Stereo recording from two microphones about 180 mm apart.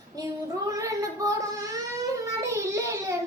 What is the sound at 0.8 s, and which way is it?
Child singing, 20° right (ahead or behind).